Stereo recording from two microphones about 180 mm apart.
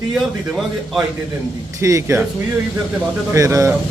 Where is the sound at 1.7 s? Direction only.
15° right (ahead or behind).